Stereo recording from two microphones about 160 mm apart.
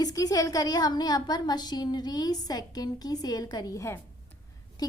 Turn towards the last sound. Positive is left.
turn(degrees=25)  # may be behind; listen again after turning